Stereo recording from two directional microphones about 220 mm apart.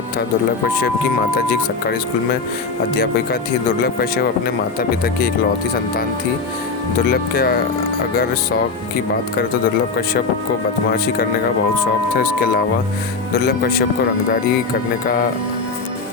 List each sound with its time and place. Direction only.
3.8 s speech: 45° left (ahead or behind)
7.0 s speech: 45° left (ahead or behind)
10.9 s speech: 45° left (ahead or behind)
15.0 s speech: 40° left (ahead or behind)